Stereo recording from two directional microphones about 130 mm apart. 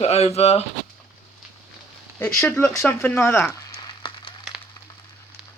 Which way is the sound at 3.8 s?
35° left (ahead or behind).